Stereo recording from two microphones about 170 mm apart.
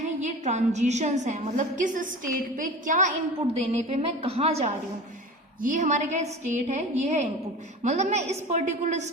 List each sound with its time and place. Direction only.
0.0 s a woman's voice: 45° right (ahead or behind)
3.7 s a woman's voice: 40° right (ahead or behind)